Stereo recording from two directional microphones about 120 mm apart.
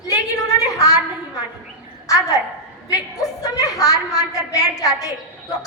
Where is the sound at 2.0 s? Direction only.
30° left (ahead or behind).